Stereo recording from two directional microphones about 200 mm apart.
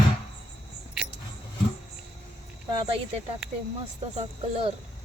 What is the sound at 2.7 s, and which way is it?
Speech, 25° right (ahead or behind).